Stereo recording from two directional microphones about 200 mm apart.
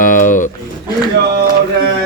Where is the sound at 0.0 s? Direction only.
40° left (ahead or behind).